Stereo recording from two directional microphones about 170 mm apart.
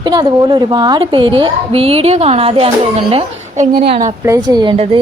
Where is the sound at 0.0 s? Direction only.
25° right (ahead or behind).